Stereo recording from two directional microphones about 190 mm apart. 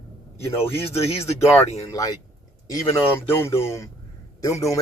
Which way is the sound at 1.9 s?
20° left (ahead or behind).